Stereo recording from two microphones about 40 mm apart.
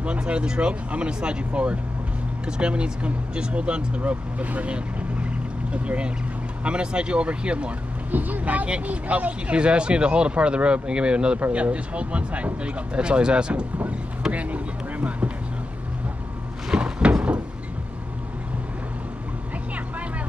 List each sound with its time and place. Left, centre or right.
0.0 s speech: right
8.1 s speech: right
9.6 s speech: right
14.3 s a sound: right
16.7 s cupboard open or close: right